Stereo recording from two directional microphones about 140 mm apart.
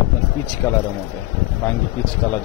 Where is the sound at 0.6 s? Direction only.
15° left (ahead or behind).